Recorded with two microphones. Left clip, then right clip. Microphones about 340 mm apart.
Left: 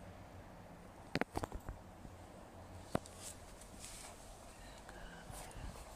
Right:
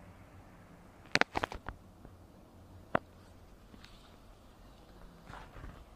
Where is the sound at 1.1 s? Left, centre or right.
Right.